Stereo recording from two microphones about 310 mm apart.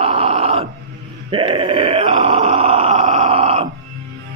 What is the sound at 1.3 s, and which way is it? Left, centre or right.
Groan, centre.